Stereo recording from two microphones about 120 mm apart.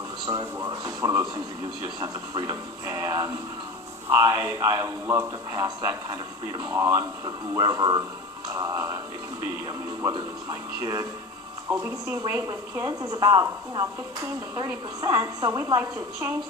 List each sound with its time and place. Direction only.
0.3 s a woman's voice: 35° right (ahead or behind)
11.7 s a man's voice: 20° right (ahead or behind)